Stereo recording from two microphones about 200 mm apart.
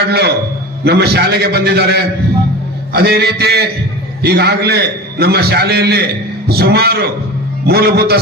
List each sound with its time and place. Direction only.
0.1 s a man's voice: 55° right (ahead or behind)